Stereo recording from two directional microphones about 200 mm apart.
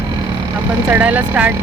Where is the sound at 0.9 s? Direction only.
10° right (ahead or behind).